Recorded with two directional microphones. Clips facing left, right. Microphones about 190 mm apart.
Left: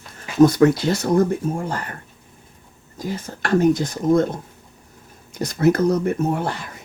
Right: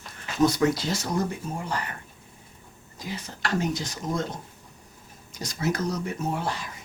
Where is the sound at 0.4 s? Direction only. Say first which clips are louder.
Left 8 dB; 55° left (ahead or behind).